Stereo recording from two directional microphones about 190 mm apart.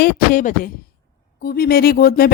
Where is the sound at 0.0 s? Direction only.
45° left (ahead or behind).